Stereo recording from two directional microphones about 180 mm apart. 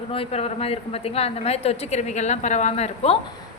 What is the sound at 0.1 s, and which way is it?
A woman's voice, 30° left (ahead or behind).